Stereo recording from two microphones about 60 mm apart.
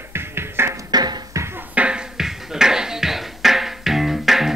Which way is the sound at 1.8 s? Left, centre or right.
Centre.